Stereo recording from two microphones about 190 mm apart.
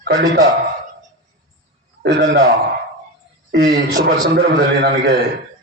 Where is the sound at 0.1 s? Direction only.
55° right (ahead or behind).